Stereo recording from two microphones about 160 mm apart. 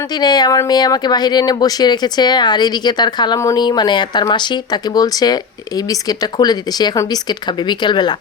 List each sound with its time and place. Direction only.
0.2 s speech: 25° left (ahead or behind)